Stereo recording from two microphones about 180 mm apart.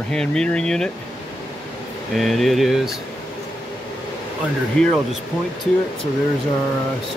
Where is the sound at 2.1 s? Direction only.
Centre (ahead or behind).